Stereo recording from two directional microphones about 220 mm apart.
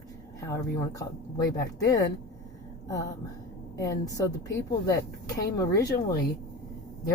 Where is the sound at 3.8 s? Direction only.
15° left (ahead or behind).